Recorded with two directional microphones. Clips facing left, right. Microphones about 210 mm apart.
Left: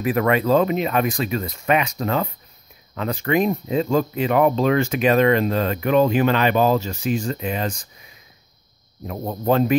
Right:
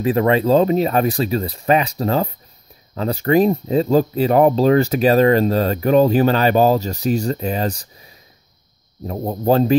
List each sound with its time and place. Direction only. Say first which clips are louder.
0.0 s speech: right 3 dB; 30° right (ahead or behind)